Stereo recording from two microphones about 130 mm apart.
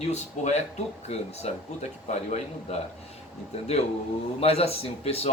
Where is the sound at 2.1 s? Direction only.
60° left (ahead or behind).